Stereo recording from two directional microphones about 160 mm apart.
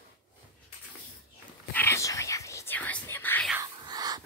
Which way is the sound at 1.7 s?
15° left (ahead or behind).